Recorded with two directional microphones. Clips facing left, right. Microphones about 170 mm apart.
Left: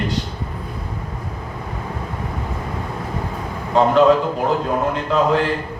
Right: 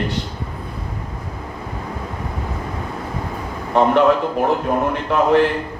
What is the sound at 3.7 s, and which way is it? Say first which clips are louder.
A man's voice: left 1 dB; 65° right (ahead or behind).